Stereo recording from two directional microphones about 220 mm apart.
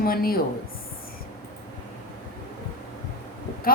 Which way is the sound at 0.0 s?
40° left (ahead or behind).